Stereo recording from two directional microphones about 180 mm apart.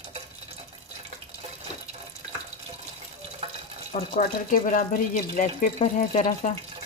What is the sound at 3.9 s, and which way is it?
Speech, 45° left (ahead or behind).